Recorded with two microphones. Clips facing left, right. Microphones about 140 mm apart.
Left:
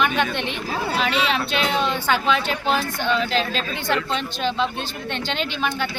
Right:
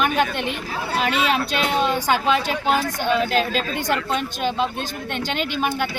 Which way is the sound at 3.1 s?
50° right (ahead or behind).